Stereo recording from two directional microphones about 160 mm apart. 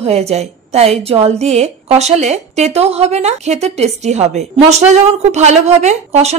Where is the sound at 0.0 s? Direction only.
40° right (ahead or behind).